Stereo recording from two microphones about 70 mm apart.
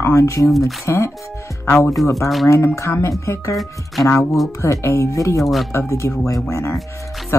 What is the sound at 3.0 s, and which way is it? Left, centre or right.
Speech, left.